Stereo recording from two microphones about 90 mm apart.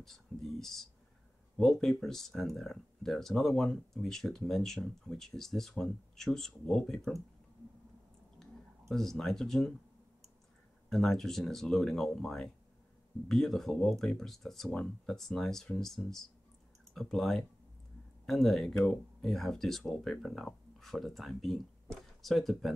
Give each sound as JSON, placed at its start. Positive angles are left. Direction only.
{"t": 0.0, "sound": "speech", "side_deg": 5}
{"t": 8.4, "sound": "speech", "side_deg": 5}
{"t": 10.9, "sound": "speech", "side_deg": 5}